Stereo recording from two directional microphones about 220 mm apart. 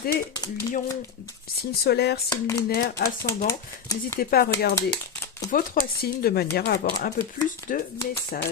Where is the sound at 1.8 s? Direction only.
45° left (ahead or behind).